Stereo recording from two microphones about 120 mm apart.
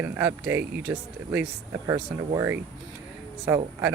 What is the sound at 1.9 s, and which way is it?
Speech, 30° right (ahead or behind).